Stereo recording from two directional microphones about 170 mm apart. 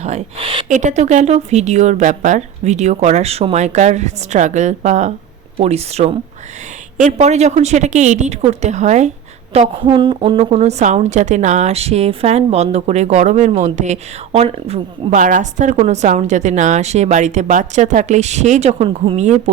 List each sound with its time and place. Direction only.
0.0 s a woman's voice: 40° right (ahead or behind)